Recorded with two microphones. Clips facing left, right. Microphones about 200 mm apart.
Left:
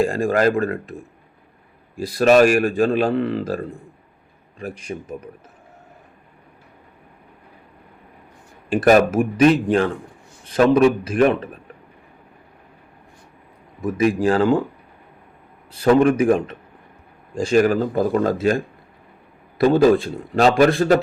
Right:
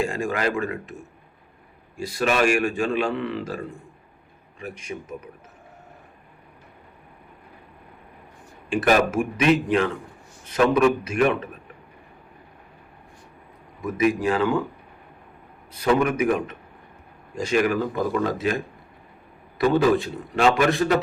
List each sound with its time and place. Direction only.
0.0 s a man's voice: 35° left (ahead or behind)
2.0 s a man's voice: 35° left (ahead or behind)
8.7 s a man's voice: 35° left (ahead or behind)
13.8 s a man's voice: 30° left (ahead or behind)
15.7 s a man's voice: 30° left (ahead or behind)